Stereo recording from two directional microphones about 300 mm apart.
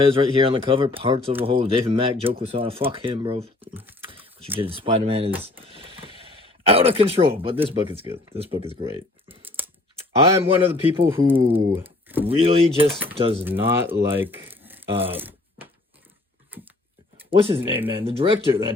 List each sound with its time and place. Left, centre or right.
0.0 s speech: centre
4.1 s a sound: centre
4.7 s speech: centre
5.5 s a sound: centre
6.7 s speech: centre
12.3 s speech: centre
13.4 s speech: centre
14.8 s speech: centre
15.1 s speech: centre
17.6 s speech: centre
17.8 s speech: centre